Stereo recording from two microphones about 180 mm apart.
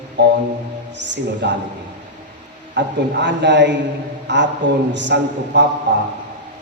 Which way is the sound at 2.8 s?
75° right (ahead or behind).